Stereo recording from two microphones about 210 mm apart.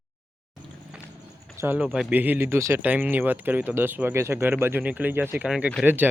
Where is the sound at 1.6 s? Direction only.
10° right (ahead or behind).